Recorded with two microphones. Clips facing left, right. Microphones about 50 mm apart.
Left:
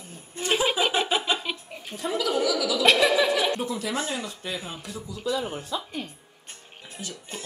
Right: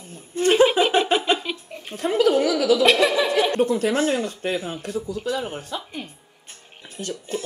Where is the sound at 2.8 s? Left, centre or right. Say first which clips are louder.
Right 2 dB; centre.